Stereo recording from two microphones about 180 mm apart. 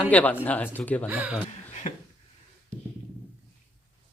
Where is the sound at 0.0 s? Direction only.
10° left (ahead or behind).